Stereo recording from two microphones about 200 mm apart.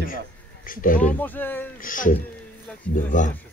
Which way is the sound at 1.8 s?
40° left (ahead or behind).